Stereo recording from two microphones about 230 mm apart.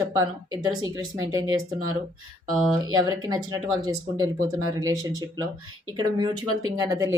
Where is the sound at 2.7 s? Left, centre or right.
Centre.